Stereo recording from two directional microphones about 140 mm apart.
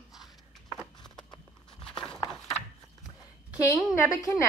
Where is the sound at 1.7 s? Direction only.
5° left (ahead or behind).